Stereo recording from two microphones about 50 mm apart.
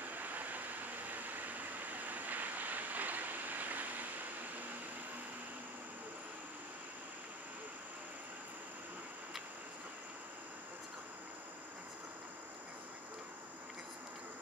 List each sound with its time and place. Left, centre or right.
0.0 s vehicle: right